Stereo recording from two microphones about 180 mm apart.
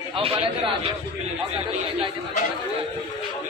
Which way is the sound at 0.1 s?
30° right (ahead or behind).